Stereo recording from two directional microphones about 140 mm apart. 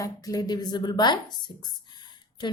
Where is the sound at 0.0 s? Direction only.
25° left (ahead or behind).